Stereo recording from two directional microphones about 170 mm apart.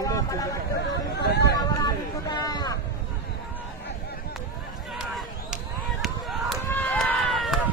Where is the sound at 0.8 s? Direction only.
75° left (ahead or behind).